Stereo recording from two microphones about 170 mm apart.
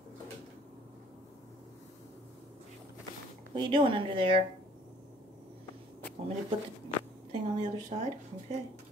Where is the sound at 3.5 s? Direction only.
30° right (ahead or behind).